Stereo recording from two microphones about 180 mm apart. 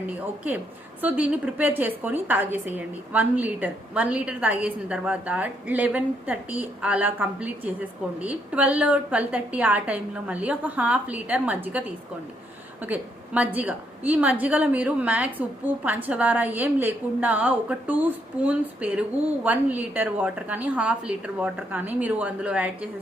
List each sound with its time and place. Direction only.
1.0 s a woman's voice: 10° right (ahead or behind)